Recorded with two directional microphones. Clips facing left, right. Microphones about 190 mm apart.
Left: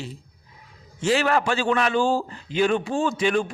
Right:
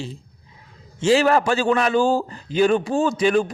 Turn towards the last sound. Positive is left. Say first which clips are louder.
# right 4 dB
turn(degrees=-40)  # may be behind; listen again after turning